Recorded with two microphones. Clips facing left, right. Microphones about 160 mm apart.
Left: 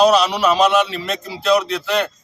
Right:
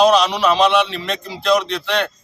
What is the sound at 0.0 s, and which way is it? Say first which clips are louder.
Speech: even; 5° left (ahead or behind).